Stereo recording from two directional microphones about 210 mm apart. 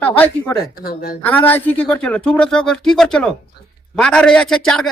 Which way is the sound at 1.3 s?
10° left (ahead or behind).